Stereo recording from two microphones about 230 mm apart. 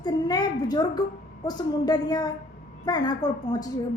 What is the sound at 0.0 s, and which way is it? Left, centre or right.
A woman's voice, centre.